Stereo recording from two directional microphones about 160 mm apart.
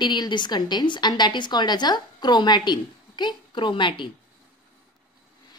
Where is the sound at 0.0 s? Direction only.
30° left (ahead or behind).